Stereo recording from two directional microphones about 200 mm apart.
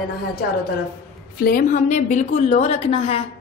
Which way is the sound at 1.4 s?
45° left (ahead or behind).